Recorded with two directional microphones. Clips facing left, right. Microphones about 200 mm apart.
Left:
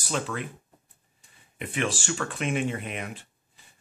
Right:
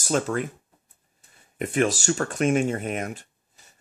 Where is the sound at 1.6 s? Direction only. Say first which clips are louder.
Right 7 dB; 45° right (ahead or behind).